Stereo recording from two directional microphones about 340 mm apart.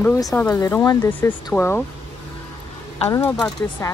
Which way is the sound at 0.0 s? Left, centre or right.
Centre.